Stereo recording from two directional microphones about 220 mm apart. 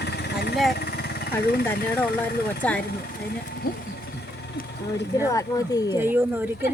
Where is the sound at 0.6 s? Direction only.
45° left (ahead or behind).